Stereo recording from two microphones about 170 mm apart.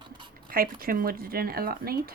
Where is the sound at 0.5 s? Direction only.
60° right (ahead or behind).